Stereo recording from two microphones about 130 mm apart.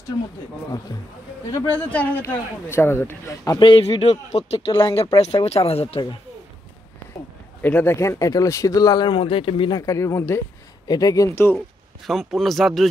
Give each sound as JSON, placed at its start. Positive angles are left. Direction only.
{"t": 1.8, "sound": "speech", "side_deg": 10}
{"t": 3.6, "sound": "speech", "side_deg": 45}
{"t": 7.6, "sound": "speech", "side_deg": 15}
{"t": 9.8, "sound": "speech", "side_deg": 25}
{"t": 12.1, "sound": "speech", "side_deg": 0}